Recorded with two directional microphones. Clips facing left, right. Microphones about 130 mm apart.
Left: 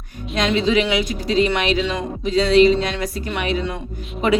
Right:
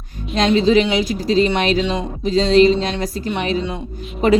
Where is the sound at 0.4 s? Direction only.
40° right (ahead or behind).